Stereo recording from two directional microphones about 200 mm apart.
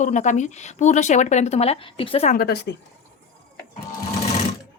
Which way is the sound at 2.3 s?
50° left (ahead or behind).